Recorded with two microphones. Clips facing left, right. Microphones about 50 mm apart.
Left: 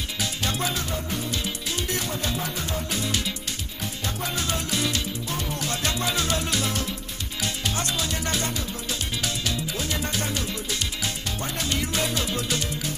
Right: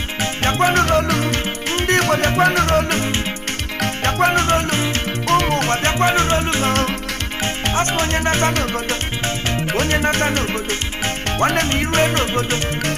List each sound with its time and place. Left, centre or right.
0.2 s music: right
5.3 s music: right
6.7 s music: right
7.6 s music: right
9.7 s music: right